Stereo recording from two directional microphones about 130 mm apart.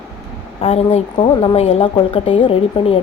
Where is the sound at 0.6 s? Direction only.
45° left (ahead or behind).